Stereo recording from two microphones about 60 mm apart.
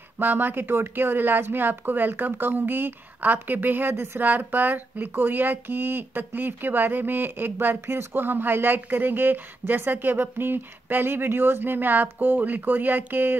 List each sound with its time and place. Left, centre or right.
0.2 s a woman's voice: right